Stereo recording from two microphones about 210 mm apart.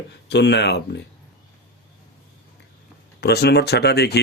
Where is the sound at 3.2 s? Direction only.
50° left (ahead or behind).